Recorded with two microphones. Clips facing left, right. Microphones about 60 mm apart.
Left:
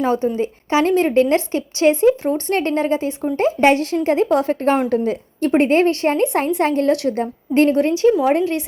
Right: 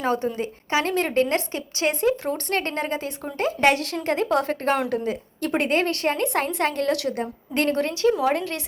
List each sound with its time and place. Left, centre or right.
0.0 s a woman's voice: centre
0.3 s a woman's voice: left
4.9 s a woman's voice: left
7.7 s a woman's voice: left